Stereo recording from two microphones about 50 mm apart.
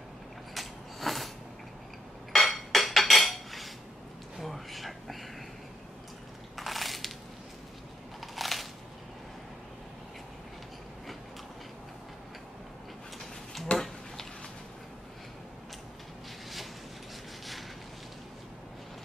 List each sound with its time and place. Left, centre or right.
0.6 s mechanisms: centre
2.3 s dishes: centre
4.4 s a sound: centre
6.5 s crushing: centre
8.2 s crunch: centre
13.7 s a sound: left